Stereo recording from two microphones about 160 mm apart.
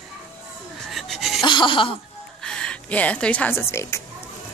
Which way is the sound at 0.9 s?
Centre (ahead or behind).